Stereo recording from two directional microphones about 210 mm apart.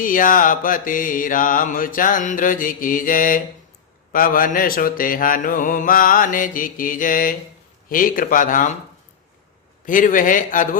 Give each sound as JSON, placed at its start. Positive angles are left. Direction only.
{"t": 0.0, "sound": "mantra", "side_deg": 40}
{"t": 9.8, "sound": "mantra", "side_deg": 40}